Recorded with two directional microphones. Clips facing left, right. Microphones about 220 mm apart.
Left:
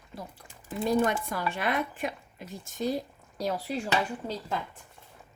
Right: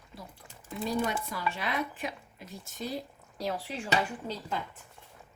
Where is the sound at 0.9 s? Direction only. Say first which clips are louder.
Left 5 dB; 50° left (ahead or behind).